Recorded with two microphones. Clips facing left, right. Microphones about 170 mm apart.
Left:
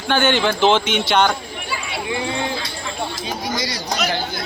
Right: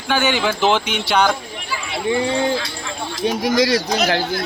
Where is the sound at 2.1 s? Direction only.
35° right (ahead or behind).